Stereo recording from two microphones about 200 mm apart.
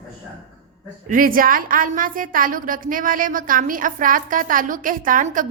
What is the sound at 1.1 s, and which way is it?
A woman's voice, 45° right (ahead or behind).